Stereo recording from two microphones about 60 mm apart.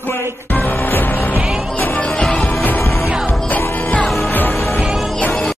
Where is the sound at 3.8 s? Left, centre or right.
Left.